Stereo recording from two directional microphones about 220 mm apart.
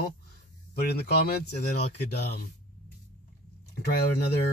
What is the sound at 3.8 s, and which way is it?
Speech, 45° left (ahead or behind).